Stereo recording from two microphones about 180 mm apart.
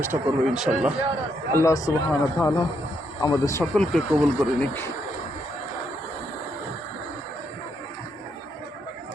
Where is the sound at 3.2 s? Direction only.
15° left (ahead or behind).